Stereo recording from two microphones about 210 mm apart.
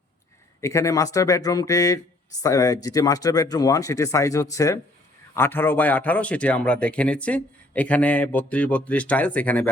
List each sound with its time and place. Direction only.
0.6 s a man's voice: 15° left (ahead or behind)